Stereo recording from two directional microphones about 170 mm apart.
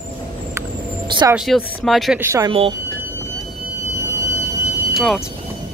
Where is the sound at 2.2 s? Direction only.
15° right (ahead or behind).